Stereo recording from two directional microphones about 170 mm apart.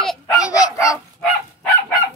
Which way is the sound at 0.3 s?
20° left (ahead or behind).